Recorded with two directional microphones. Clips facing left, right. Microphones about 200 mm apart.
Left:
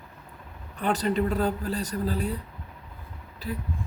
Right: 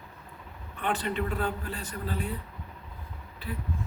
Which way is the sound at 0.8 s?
40° left (ahead or behind).